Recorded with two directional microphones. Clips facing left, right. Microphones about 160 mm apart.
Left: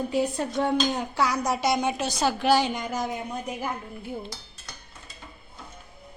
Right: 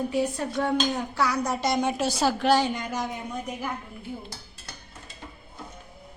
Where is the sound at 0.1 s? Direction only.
25° left (ahead or behind).